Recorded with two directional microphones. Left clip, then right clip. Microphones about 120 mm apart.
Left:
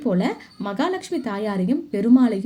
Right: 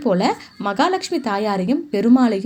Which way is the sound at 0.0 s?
25° right (ahead or behind).